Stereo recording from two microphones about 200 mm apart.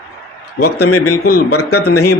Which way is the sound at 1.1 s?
50° left (ahead or behind).